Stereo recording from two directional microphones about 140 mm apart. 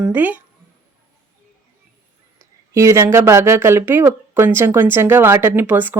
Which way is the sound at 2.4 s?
20° right (ahead or behind).